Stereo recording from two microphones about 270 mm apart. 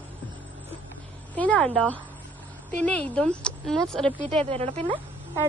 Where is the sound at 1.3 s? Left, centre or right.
Centre.